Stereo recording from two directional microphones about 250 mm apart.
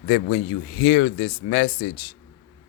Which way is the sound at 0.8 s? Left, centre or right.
Left.